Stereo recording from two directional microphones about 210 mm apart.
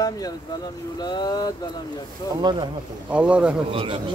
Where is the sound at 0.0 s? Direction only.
15° left (ahead or behind).